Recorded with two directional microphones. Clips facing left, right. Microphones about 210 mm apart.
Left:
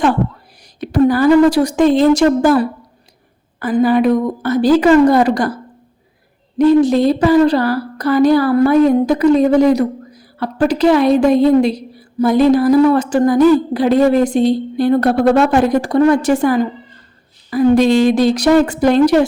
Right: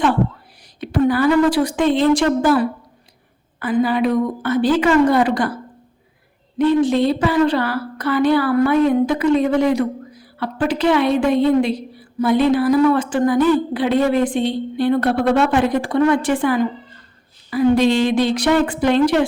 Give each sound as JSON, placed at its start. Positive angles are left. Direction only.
{"t": 0.8, "sound": "speech", "side_deg": 40}
{"t": 6.6, "sound": "speech", "side_deg": 40}